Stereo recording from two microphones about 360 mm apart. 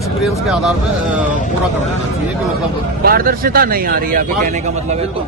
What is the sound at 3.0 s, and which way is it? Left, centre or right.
Speech, right.